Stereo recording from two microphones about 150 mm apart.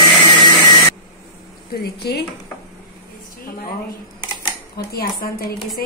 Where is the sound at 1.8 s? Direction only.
90° left.